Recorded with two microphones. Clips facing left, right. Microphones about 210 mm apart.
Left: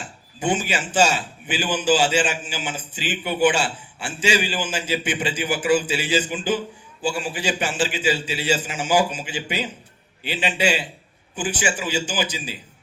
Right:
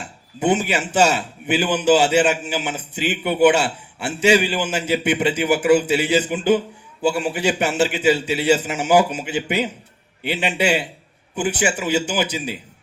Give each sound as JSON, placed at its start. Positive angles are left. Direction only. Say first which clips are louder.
{"t": 0.3, "sound": "a man's voice", "louder": "right 4 dB", "side_deg": -60}